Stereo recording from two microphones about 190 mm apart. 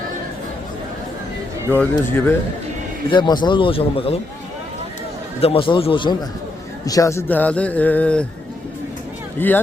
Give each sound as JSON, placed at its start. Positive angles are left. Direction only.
{"t": 1.7, "sound": "speech", "side_deg": 10}
{"t": 3.1, "sound": "a man's voice", "side_deg": 25}
{"t": 5.4, "sound": "a man's voice", "side_deg": 30}
{"t": 9.4, "sound": "speech", "side_deg": 10}